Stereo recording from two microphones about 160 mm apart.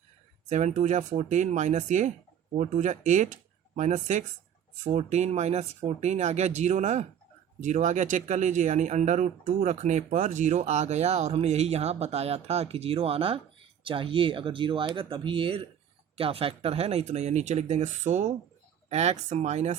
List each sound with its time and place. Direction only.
0.4 s speech: 50° right (ahead or behind)